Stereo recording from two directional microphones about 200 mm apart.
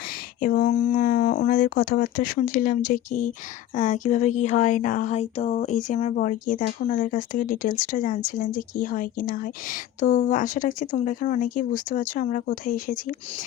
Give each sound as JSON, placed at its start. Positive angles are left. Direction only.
{"t": 0.4, "sound": "a woman's voice", "side_deg": 40}